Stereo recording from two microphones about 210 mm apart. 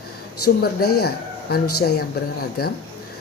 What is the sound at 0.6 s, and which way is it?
A woman's voice, 45° left (ahead or behind).